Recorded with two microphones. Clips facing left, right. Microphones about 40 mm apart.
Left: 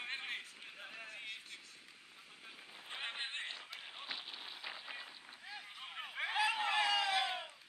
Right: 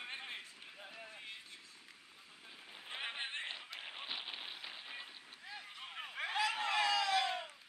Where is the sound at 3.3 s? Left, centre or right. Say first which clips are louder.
Right 1 dB; centre.